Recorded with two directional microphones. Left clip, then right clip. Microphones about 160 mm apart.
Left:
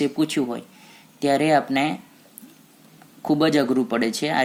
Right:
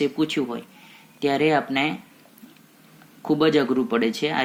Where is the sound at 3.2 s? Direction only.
90° left.